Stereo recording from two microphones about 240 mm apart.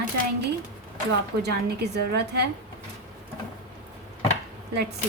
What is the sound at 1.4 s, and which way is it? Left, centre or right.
A woman's voice, right.